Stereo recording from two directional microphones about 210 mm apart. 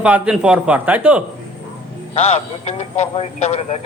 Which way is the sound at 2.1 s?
30° left (ahead or behind).